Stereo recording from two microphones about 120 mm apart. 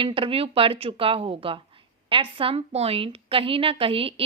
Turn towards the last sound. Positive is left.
turn(degrees=-50)  # may be behind; listen again after turning